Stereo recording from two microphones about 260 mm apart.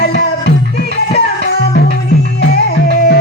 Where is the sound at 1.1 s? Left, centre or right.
Left.